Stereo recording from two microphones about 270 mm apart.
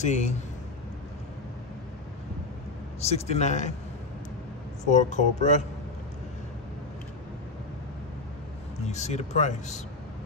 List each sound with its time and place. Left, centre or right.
0.0 s speech: left
3.0 s speech: left
4.8 s speech: left
8.8 s speech: left